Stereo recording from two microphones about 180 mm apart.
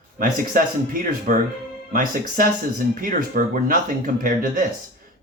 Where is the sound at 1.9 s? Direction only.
50° right (ahead or behind).